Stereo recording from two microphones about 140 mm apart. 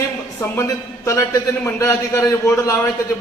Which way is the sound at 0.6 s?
20° left (ahead or behind).